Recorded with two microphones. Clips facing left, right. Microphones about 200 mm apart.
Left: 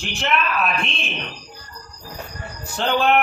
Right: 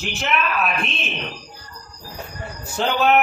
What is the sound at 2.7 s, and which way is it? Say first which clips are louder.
Speech: right 1 dB; 5° right (ahead or behind).